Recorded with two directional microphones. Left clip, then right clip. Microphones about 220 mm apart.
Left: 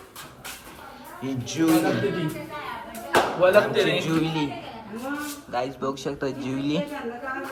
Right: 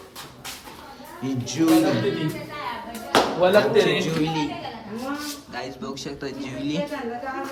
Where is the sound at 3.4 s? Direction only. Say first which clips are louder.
Even; 50° right (ahead or behind).